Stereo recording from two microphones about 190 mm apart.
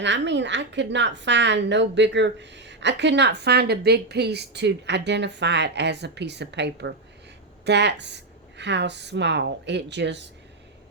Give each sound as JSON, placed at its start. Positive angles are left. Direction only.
{"t": 0.0, "sound": "a woman's voice", "side_deg": -70}